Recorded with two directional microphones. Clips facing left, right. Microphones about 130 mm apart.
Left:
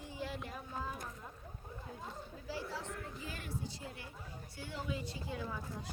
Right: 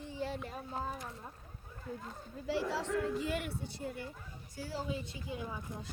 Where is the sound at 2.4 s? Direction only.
80° right; by 3.9 s 60° right (ahead or behind).